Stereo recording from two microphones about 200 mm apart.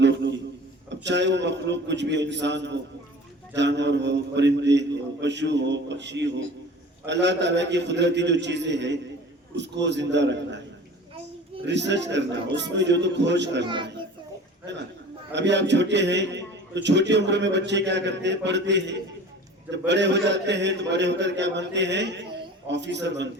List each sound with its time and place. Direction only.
0.0 s a sound: 60° right (ahead or behind)
1.0 s a man's voice: 60° right (ahead or behind)
11.6 s a man's voice: 60° right (ahead or behind)
15.3 s a man's voice: 60° right (ahead or behind)